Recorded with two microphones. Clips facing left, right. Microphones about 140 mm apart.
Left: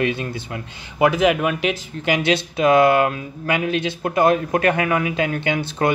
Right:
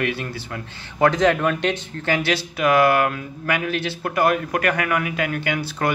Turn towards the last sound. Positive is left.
turn(degrees=20)  # may be behind; listen again after turning